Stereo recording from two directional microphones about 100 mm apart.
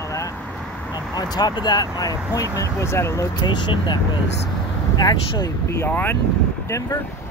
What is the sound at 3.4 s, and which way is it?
Speech, 50° left (ahead or behind).